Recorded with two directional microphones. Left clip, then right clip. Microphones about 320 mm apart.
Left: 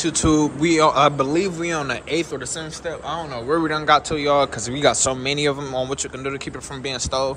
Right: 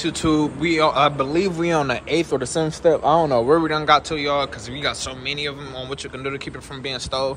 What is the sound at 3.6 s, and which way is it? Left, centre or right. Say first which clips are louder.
Speech: even; centre.